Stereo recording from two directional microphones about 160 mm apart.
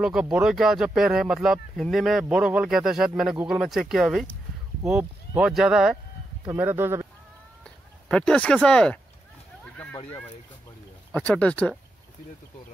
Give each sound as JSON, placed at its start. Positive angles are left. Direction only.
{"t": 0.0, "sound": "speech", "side_deg": -5}
{"t": 6.4, "sound": "speech", "side_deg": -15}
{"t": 7.6, "sound": "a sound", "side_deg": 5}
{"t": 8.6, "sound": "speech", "side_deg": 5}
{"t": 11.1, "sound": "speech", "side_deg": 5}